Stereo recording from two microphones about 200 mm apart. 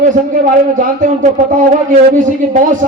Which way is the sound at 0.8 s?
40° right (ahead or behind).